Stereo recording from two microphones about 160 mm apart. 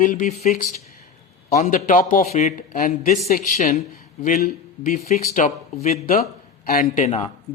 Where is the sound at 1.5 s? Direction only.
55° left (ahead or behind).